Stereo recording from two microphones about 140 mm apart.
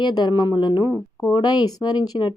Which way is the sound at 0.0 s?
30° left (ahead or behind).